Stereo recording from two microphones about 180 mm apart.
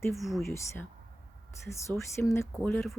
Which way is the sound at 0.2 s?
Centre (ahead or behind).